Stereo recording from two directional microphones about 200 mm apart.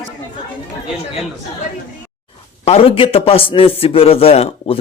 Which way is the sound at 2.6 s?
30° left (ahead or behind).